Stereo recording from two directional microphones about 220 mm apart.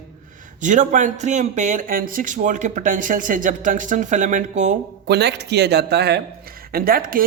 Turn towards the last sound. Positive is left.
turn(degrees=-40)  # may be behind; listen again after turning